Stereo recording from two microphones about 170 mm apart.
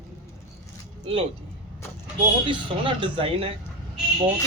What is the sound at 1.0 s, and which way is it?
Speech, 35° right (ahead or behind).